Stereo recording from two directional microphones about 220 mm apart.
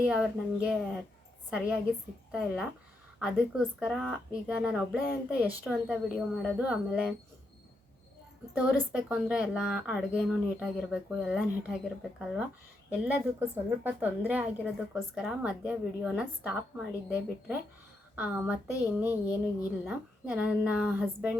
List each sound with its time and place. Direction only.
0.0 s a woman's voice: 5° right (ahead or behind)
8.5 s a woman's voice: 5° right (ahead or behind)